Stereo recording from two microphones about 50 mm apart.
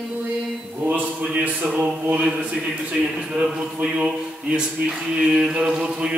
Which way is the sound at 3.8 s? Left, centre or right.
Centre.